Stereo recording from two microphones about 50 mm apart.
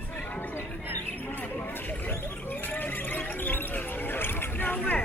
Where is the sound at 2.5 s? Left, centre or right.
Left.